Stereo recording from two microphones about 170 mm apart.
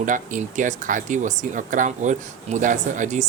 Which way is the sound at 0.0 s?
50° right (ahead or behind).